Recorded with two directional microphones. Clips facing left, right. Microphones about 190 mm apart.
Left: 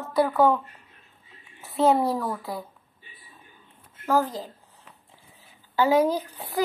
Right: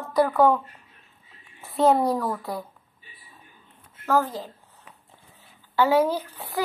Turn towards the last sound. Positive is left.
turn(degrees=15)  # may be behind; listen again after turning